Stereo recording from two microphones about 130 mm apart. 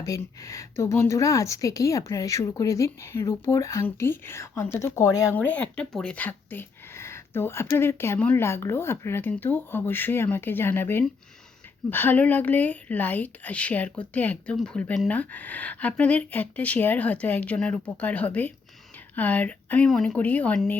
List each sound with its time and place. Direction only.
0.0 s a woman's voice: 25° left (ahead or behind)
5.3 s speech: 10° left (ahead or behind)